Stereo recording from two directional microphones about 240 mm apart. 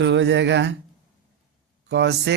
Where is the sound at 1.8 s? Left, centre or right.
Right.